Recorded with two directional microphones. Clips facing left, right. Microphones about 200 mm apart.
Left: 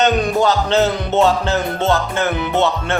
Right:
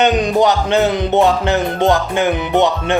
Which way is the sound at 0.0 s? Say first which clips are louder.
Right 2 dB; 15° right (ahead or behind).